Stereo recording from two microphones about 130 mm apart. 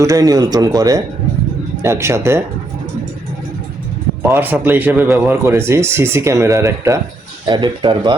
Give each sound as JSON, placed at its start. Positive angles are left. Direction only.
{"t": 0.0, "sound": "speech", "side_deg": -25}
{"t": 4.3, "sound": "speech", "side_deg": -15}
{"t": 7.4, "sound": "a man's voice", "side_deg": -35}